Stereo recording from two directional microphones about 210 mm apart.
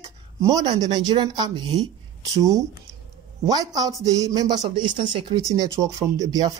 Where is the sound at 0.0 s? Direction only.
15° right (ahead or behind).